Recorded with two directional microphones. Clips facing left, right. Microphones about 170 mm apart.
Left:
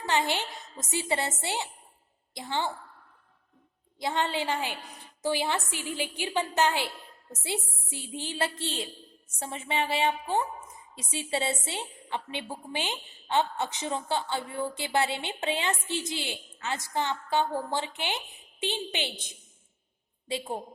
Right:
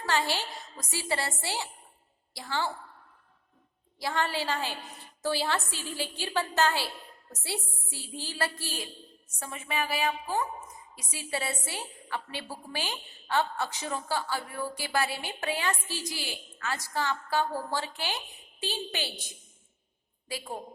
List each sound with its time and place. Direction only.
0.0 s a woman's voice: 20° left (ahead or behind)
4.0 s a woman's voice: 20° left (ahead or behind)